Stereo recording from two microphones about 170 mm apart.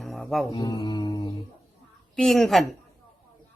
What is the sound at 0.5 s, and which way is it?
Mantra, 25° left (ahead or behind).